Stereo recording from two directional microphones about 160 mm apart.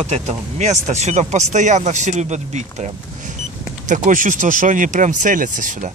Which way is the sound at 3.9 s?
55° right (ahead or behind).